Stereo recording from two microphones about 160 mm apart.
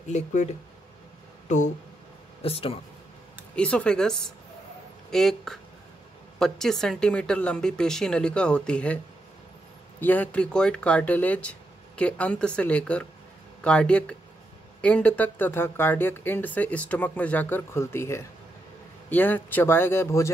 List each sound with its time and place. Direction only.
0.1 s speech: 50° left (ahead or behind)
2.4 s speech: 35° left (ahead or behind)
3.5 s speech: 5° left (ahead or behind)